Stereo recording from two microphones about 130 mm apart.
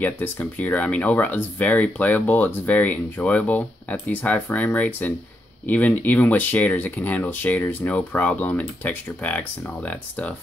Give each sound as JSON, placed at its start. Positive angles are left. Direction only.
{"t": 0.0, "sound": "speech", "side_deg": 10}